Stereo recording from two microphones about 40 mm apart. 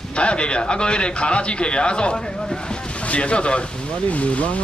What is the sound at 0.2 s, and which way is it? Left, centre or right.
Speech, left.